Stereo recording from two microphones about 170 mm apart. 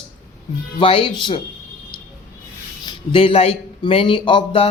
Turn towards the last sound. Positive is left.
turn(degrees=30)  # may be behind; listen again after turning